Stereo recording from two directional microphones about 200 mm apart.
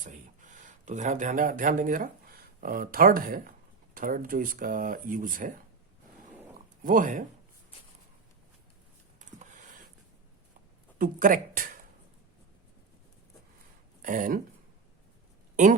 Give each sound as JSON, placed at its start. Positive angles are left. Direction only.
{"t": 0.0, "sound": "speech", "side_deg": -40}
{"t": 6.8, "sound": "speech", "side_deg": -45}
{"t": 9.1, "sound": "a sound", "side_deg": -35}
{"t": 10.9, "sound": "speech", "side_deg": -45}
{"t": 14.0, "sound": "speech", "side_deg": -40}